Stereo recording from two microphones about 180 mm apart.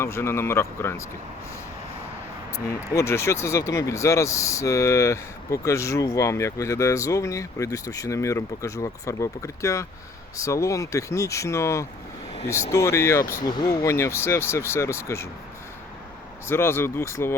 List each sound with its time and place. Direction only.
0.0 s speech: 15° left (ahead or behind)
2.9 s speech: 15° left (ahead or behind)
16.5 s speech: 15° left (ahead or behind)